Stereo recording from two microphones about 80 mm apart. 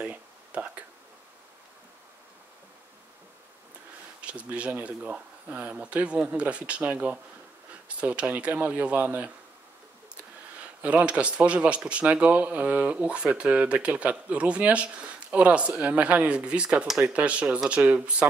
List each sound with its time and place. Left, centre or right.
0.0 s a sound: centre
4.2 s speech: centre
10.8 s speech: centre